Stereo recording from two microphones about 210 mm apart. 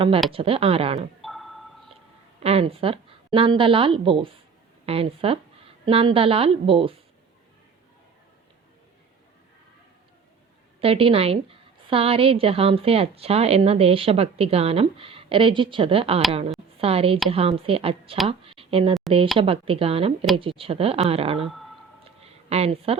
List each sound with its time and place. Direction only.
0.3 s a woman's voice: 25° right (ahead or behind)
1.2 s marimba: centre (ahead or behind)
2.4 s a woman's voice: 30° right (ahead or behind)
10.8 s a woman's voice: 25° right (ahead or behind)
21.3 s speech: centre (ahead or behind)
22.2 s a sound: 30° right (ahead or behind)